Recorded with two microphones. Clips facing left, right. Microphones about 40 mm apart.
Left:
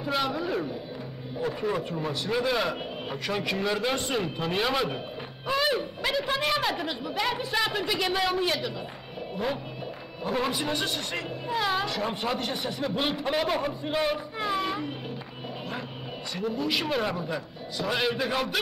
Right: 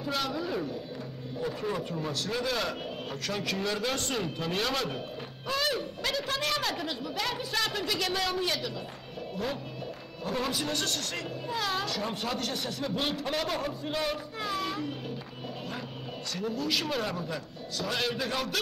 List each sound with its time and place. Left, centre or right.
0.0 s a woman's voice: centre
10.2 s a woman's voice: centre
16.3 s a woman's voice: centre